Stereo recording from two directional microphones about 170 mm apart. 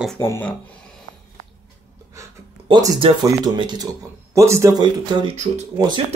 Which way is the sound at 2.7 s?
25° right (ahead or behind).